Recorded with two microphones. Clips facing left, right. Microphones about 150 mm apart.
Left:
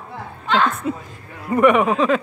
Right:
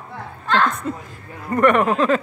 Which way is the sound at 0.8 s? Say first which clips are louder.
Left 2 dB; 5° left (ahead or behind).